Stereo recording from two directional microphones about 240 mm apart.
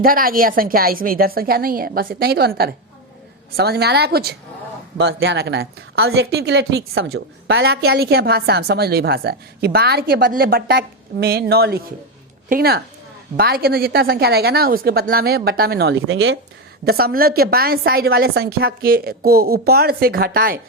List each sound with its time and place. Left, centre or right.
0.0 s a woman's voice: right
16.8 s a woman's voice: right